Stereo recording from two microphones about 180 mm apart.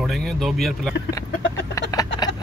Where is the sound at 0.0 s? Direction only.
Centre (ahead or behind).